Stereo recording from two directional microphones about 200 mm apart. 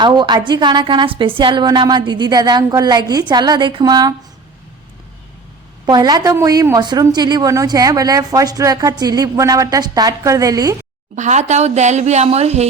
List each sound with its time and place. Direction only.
0.0 s a woman's voice: 20° right (ahead or behind)
5.8 s a woman's voice: 20° right (ahead or behind)
11.1 s speech: 35° right (ahead or behind)